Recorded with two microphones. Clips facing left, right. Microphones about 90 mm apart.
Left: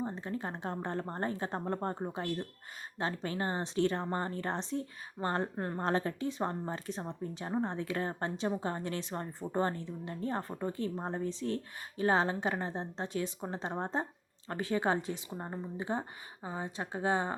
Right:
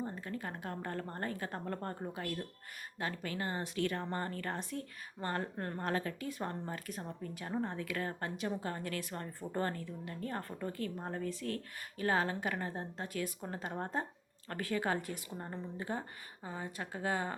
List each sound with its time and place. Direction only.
0.0 s a woman's voice: 25° left (ahead or behind)